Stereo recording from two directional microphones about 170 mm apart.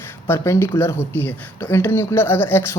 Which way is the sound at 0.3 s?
15° left (ahead or behind).